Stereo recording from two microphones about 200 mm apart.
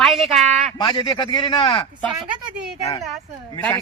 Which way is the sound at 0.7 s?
20° left (ahead or behind).